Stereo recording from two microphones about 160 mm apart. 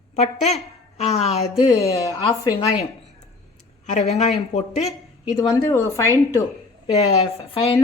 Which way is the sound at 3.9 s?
45° left (ahead or behind).